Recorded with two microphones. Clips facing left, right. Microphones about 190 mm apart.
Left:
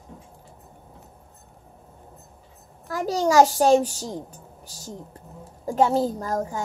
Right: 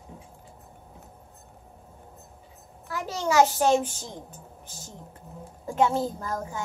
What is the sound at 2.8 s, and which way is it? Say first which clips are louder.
A woman's voice: left 6 dB; 40° left (ahead or behind).